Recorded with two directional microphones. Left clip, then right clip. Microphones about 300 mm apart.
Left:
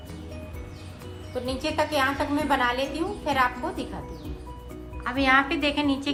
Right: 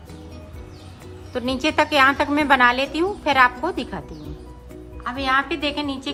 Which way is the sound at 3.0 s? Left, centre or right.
Centre.